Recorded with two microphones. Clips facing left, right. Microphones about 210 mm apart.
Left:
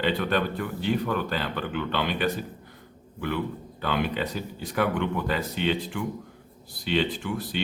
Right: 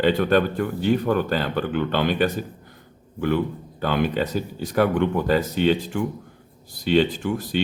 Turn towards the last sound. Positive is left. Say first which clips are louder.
# right 6 dB
turn(degrees=-45)  # may be behind; listen again after turning